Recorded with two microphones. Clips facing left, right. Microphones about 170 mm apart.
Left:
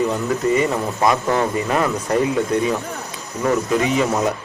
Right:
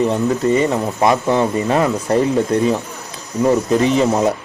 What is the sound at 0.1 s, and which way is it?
A man's voice, 30° right (ahead or behind).